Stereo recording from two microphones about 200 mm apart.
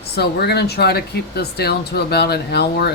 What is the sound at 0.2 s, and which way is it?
Speech, 55° left (ahead or behind).